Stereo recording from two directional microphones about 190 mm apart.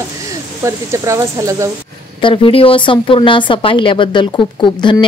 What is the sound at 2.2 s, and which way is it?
Speech, 30° left (ahead or behind).